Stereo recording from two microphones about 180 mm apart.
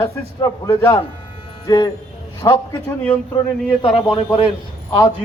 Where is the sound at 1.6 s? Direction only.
20° left (ahead or behind).